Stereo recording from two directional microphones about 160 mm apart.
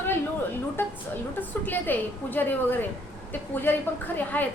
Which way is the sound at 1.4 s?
10° left (ahead or behind).